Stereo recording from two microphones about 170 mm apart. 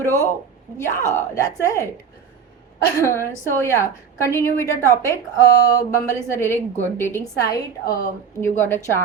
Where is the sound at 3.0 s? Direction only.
15° left (ahead or behind).